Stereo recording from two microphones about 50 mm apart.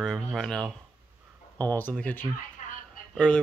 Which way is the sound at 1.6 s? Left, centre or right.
Left.